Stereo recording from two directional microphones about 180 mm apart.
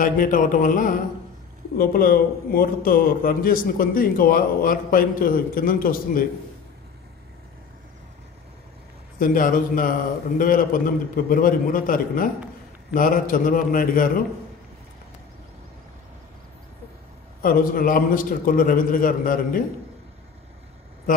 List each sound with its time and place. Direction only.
0.0 s a man's voice: 50° left (ahead or behind)
9.2 s a man's voice: 50° left (ahead or behind)
17.4 s a man's voice: 50° left (ahead or behind)